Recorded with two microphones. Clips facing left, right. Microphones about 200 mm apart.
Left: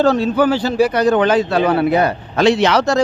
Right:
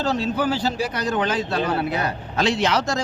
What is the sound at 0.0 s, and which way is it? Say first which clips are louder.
A man's voice: left 8 dB; 60° left (ahead or behind).